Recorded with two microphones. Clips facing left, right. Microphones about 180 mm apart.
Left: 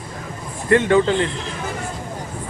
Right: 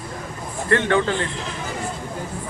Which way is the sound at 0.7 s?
15° left (ahead or behind).